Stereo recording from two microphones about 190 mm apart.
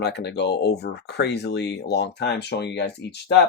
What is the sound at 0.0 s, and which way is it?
Speech, 60° left (ahead or behind).